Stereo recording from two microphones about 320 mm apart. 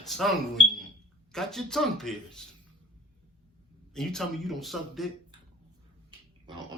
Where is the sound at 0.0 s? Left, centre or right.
Centre.